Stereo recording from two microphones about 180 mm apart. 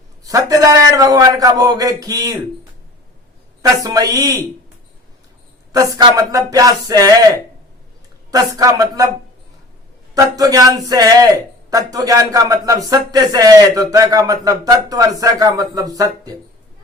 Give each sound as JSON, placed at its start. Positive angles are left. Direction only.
{"t": 0.3, "sound": "a man's voice", "side_deg": -20}
{"t": 3.8, "sound": "a man's voice", "side_deg": -20}
{"t": 5.7, "sound": "a man's voice", "side_deg": -20}
{"t": 8.3, "sound": "a man's voice", "side_deg": -20}
{"t": 10.2, "sound": "a man's voice", "side_deg": -20}